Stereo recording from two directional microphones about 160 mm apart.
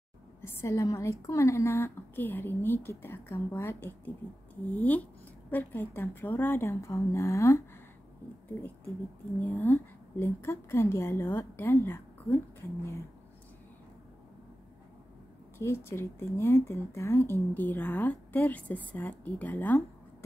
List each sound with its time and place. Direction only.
0.4 s a woman's voice: 15° left (ahead or behind)
9.4 s a woman's voice: 10° left (ahead or behind)
15.6 s a woman's voice: 15° left (ahead or behind)